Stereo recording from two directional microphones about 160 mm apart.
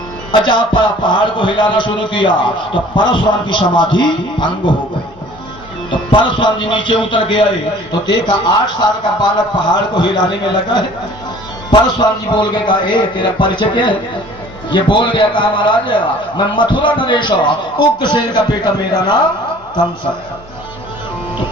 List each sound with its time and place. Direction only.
0.3 s a man's voice: 30° left (ahead or behind)
5.9 s a man's voice: 30° left (ahead or behind)